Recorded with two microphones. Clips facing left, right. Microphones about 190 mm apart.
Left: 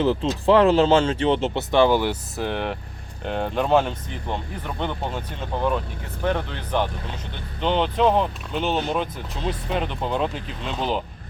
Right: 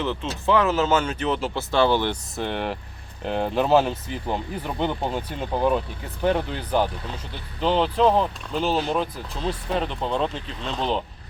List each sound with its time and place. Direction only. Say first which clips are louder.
0.0 s speech: left 6 dB; 35° left (ahead or behind); by 11.0 s 5° left (ahead or behind)